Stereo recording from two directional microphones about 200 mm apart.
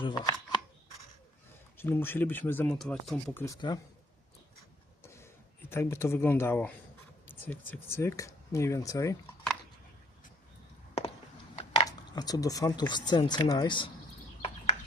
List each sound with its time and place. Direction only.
0.0 s speech: 20° left (ahead or behind)
1.8 s speech: 10° left (ahead or behind)
3.4 s speech: 20° left (ahead or behind)
5.0 s a sound: 15° left (ahead or behind)
7.3 s speech: 10° left (ahead or behind)
11.5 s a sound: 30° left (ahead or behind)
11.9 s speech: 20° left (ahead or behind)